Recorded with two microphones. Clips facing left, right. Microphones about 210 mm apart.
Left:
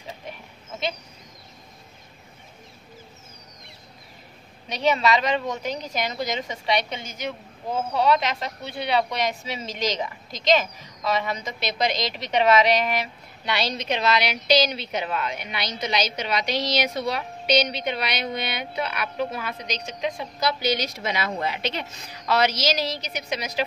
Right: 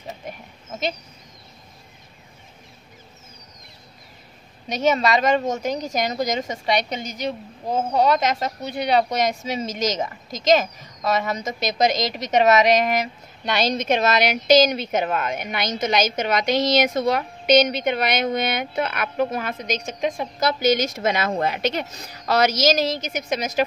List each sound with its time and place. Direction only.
4.6 s a woman's voice: 45° right (ahead or behind)